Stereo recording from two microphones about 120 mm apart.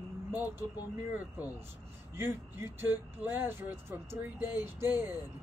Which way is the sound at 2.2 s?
20° right (ahead or behind).